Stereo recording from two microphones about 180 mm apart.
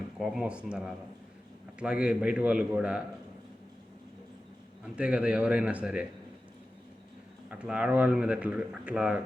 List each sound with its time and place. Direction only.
0.2 s a man's voice: 5° right (ahead or behind)
4.9 s a man's voice: 5° right (ahead or behind)
7.5 s speech: 5° right (ahead or behind)